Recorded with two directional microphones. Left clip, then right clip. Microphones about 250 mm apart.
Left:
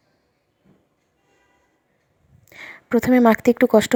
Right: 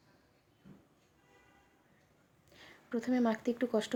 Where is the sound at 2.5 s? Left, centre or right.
Left.